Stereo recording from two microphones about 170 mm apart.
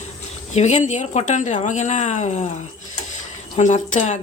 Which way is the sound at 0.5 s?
40° left (ahead or behind).